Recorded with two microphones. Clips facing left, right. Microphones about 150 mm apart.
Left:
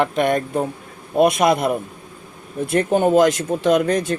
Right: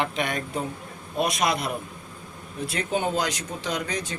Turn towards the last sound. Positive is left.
turn(degrees=55)  # may be behind; listen again after turning